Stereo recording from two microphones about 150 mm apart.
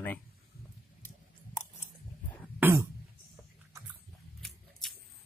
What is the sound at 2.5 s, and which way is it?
Speech, 15° right (ahead or behind).